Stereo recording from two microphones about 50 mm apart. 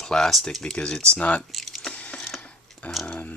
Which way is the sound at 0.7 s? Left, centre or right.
Centre.